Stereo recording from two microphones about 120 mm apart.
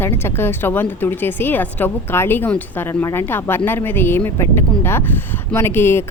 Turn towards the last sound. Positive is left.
turn(degrees=20)  # may be behind; listen again after turning